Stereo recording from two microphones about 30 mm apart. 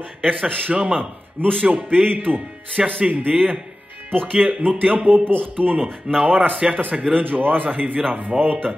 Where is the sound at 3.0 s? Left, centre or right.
Right.